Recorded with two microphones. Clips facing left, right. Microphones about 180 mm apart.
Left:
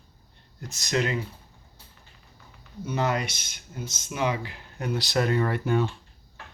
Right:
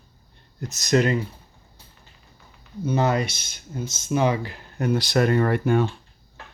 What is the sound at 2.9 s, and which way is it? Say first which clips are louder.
Speech: right 5 dB; 35° right (ahead or behind).